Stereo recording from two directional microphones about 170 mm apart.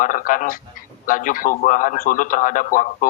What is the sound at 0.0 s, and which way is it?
A man's voice, 50° left (ahead or behind).